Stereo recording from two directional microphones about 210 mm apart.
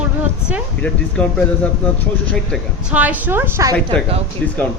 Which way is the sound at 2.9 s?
5° right (ahead or behind).